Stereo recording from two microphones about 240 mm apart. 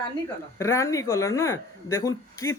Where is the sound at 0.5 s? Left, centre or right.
Centre.